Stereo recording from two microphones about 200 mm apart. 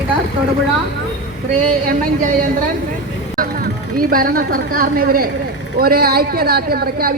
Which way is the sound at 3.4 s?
45° right (ahead or behind).